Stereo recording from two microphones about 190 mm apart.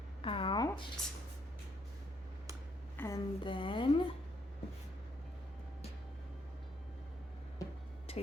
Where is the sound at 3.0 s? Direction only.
10° left (ahead or behind).